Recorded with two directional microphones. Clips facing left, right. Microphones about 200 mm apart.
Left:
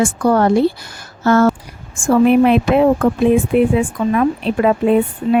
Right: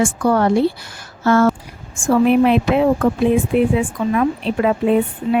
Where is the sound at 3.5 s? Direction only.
50° left (ahead or behind).